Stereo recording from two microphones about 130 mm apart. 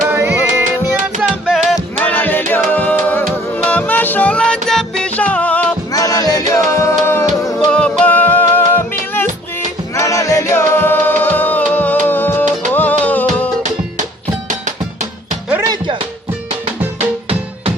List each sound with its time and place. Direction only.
0.1 s music: 15° right (ahead or behind)
2.0 s music: 15° left (ahead or behind)
5.9 s music: 30° left (ahead or behind)
9.9 s music: 25° left (ahead or behind)
15.6 s music: 30° right (ahead or behind)